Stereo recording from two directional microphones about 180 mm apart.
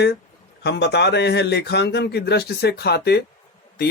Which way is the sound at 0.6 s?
70° left (ahead or behind).